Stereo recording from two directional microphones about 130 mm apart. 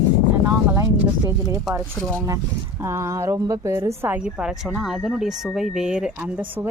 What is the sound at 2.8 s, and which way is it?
A woman's voice, 20° right (ahead or behind).